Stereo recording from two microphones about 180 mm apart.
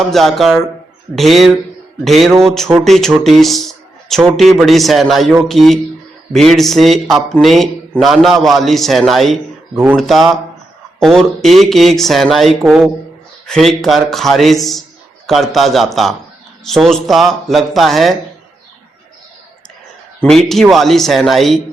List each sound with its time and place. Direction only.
0.0 s a man's voice: centre (ahead or behind)
20.2 s a man's voice: centre (ahead or behind)